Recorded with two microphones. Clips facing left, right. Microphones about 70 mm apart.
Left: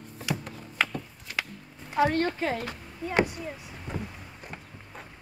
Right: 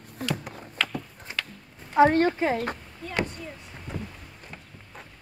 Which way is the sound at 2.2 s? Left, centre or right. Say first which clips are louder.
Right 5 dB; centre.